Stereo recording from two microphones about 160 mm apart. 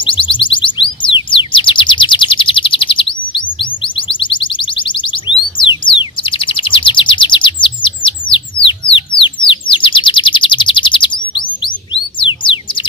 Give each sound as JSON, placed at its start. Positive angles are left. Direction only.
{"t": 0.0, "sound": "music", "side_deg": 30}
{"t": 7.6, "sound": "chirp", "side_deg": 30}
{"t": 8.9, "sound": "bird", "side_deg": 30}
{"t": 11.3, "sound": "chirp", "side_deg": 30}
{"t": 12.2, "sound": "music", "side_deg": 30}